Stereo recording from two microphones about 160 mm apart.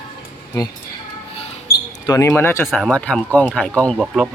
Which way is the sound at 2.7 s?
5° left (ahead or behind).